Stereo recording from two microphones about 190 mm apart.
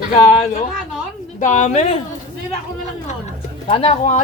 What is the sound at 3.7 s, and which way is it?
Speech, 30° left (ahead or behind).